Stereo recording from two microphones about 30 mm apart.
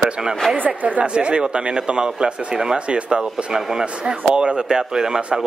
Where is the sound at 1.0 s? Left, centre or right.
Right.